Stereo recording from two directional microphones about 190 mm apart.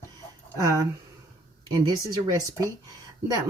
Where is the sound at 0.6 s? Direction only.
15° right (ahead or behind).